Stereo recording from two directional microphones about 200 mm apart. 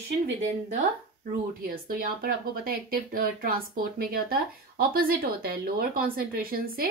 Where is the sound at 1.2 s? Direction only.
45° right (ahead or behind).